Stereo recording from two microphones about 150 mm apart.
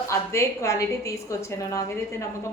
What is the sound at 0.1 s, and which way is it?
A woman's voice, 20° left (ahead or behind).